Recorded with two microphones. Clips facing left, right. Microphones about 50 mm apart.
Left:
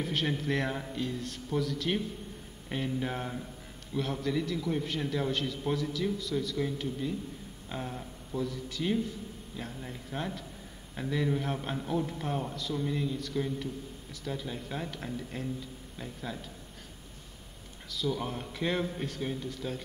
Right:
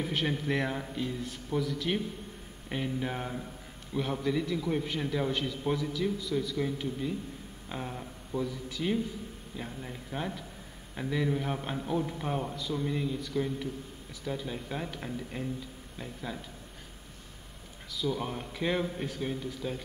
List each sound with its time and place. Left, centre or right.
0.0 s a man's voice: centre
17.9 s a man's voice: centre